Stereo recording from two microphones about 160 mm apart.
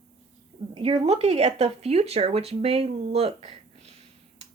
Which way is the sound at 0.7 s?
40° right (ahead or behind).